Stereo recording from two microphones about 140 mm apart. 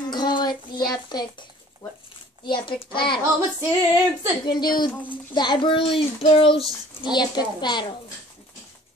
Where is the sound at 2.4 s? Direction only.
35° left (ahead or behind).